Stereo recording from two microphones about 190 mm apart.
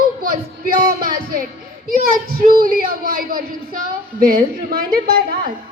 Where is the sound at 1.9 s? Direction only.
50° right (ahead or behind).